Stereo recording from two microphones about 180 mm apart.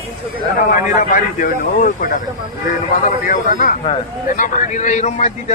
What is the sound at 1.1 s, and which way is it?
Speech, 50° left (ahead or behind).